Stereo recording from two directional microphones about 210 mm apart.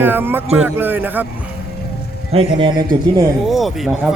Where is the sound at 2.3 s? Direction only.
25° right (ahead or behind).